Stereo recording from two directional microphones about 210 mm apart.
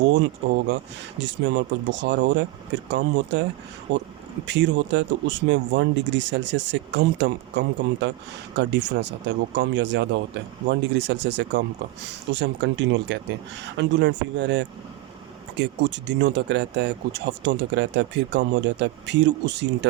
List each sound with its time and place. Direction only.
0.0 s speech: 60° right (ahead or behind)